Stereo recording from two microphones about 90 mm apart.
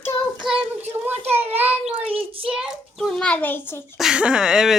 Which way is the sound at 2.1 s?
90° right.